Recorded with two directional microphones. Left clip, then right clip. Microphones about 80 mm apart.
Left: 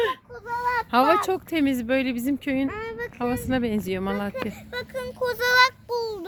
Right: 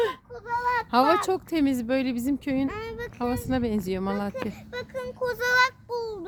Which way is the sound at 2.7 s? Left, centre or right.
Left.